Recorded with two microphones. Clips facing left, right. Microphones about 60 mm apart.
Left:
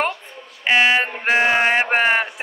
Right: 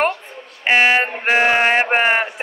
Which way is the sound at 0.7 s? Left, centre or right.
Centre.